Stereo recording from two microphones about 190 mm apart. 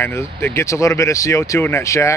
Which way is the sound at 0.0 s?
15° left (ahead or behind).